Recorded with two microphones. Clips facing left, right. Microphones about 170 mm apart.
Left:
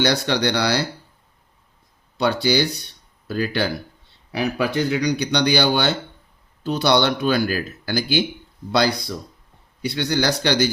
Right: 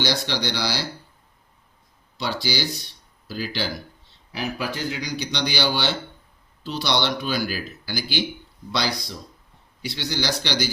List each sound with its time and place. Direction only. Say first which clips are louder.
0.3 s speech: left 6 dB; 60° left (ahead or behind)
2.1 s speech: left 8 dB; 60° left (ahead or behind)